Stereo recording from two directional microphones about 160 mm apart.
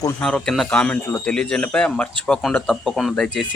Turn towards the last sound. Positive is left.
turn(degrees=0)  # may be behind; listen again after turning